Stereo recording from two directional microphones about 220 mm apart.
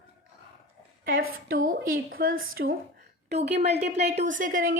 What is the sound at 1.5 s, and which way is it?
A woman's voice, 40° right (ahead or behind).